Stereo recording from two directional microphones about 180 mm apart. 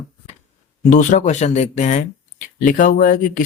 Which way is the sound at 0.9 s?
45° left (ahead or behind).